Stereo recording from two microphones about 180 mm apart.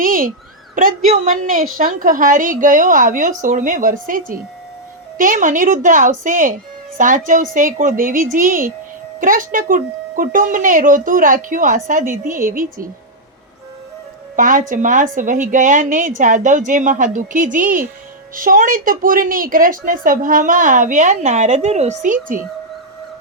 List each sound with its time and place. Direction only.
0.0 s a sound: 50° right (ahead or behind)
1.0 s a woman's voice: 40° right (ahead or behind)
14.3 s a woman's voice: 45° right (ahead or behind)